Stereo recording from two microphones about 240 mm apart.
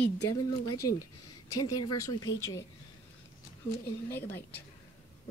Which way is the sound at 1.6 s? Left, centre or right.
Left.